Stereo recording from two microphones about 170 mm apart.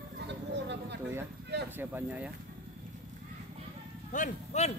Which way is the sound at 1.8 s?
10° right (ahead or behind).